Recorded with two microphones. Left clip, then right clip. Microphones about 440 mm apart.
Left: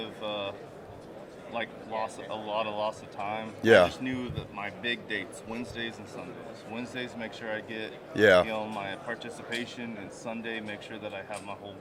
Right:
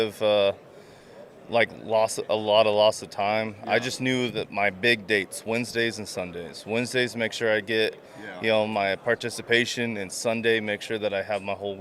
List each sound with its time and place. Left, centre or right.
0.0 s speech: right
1.5 s speech: right